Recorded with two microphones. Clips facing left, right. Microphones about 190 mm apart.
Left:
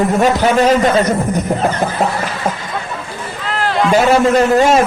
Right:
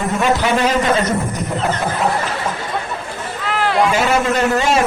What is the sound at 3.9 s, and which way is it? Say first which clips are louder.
Speech: left 6 dB; 40° left (ahead or behind).